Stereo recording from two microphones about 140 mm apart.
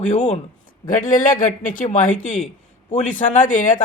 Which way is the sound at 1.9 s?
60° left (ahead or behind).